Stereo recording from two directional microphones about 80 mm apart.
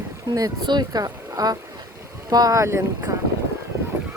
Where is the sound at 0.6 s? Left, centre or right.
Right.